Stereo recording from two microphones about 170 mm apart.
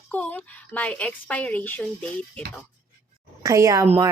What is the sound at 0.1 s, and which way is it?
A woman's voice, 10° left (ahead or behind).